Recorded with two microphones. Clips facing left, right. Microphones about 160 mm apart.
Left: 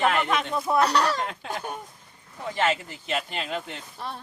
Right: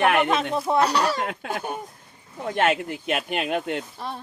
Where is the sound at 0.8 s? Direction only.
Centre (ahead or behind).